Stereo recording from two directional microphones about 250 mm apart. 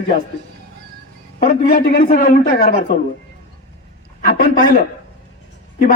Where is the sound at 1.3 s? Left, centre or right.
Left.